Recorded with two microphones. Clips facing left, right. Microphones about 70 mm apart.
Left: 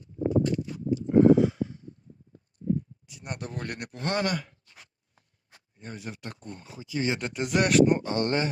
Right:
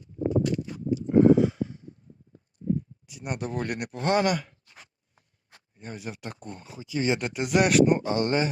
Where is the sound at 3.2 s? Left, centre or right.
Centre.